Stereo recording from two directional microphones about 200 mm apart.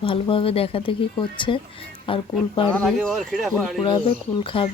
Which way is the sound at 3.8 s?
25° left (ahead or behind).